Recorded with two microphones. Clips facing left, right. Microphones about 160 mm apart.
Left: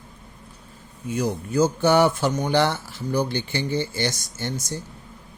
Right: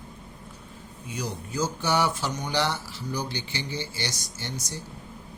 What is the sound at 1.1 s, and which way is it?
Speech, 55° left (ahead or behind).